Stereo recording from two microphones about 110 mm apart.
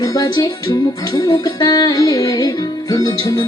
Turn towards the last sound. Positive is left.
turn(degrees=35)  # may be behind; listen again after turning